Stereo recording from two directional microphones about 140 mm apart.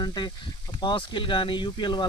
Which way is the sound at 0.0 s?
30° left (ahead or behind).